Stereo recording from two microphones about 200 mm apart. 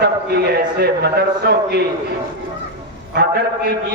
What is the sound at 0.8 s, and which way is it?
Speech, 55° right (ahead or behind).